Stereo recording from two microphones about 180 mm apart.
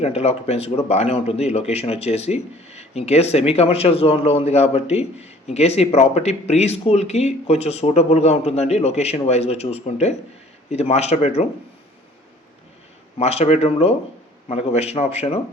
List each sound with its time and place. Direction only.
0.0 s speech: 35° left (ahead or behind)
13.1 s speech: 35° left (ahead or behind)